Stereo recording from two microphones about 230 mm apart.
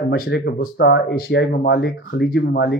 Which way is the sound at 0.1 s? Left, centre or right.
Left.